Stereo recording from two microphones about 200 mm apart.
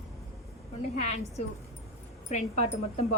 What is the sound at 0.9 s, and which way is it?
A woman's voice, 35° left (ahead or behind).